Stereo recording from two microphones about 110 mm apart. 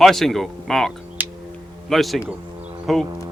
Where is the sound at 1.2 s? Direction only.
15° right (ahead or behind).